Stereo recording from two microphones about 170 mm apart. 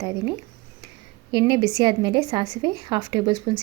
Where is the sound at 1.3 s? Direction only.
25° right (ahead or behind).